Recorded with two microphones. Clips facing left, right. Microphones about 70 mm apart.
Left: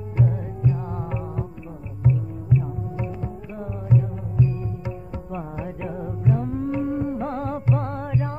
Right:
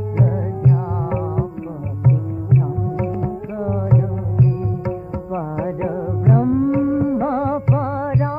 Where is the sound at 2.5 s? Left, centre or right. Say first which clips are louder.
Right 5 dB; right.